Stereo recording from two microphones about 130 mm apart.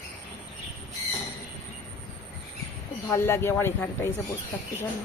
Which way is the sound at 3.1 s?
20° left (ahead or behind).